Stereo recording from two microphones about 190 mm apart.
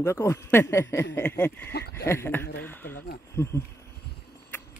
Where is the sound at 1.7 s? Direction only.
60° left (ahead or behind).